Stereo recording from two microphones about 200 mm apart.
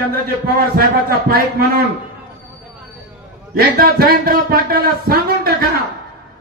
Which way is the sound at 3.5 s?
50° right (ahead or behind).